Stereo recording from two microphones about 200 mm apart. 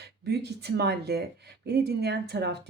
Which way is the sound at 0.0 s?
55° right (ahead or behind).